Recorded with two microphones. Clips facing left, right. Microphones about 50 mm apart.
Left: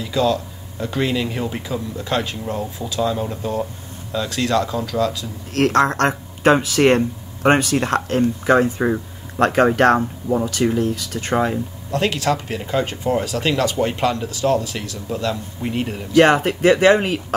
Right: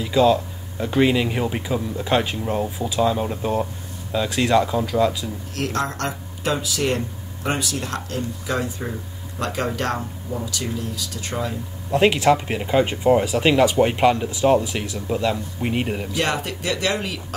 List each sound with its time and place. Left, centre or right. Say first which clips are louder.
0.0 s speech: right 2 dB; centre
5.5 s speech: left 9 dB; left
11.9 s speech: right 4 dB; centre
16.2 s speech: left 13 dB; left